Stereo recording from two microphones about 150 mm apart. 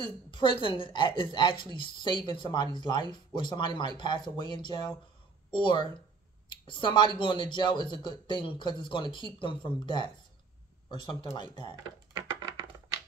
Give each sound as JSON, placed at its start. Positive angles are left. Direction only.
{"t": 0.3, "sound": "a woman's voice", "side_deg": 35}